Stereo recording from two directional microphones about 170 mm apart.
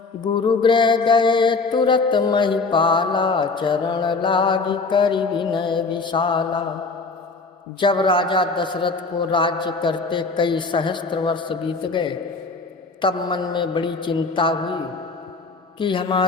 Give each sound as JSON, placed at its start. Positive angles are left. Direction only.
{"t": 0.2, "sound": "mantra", "side_deg": 25}
{"t": 7.8, "sound": "mantra", "side_deg": 30}
{"t": 15.8, "sound": "mantra", "side_deg": 30}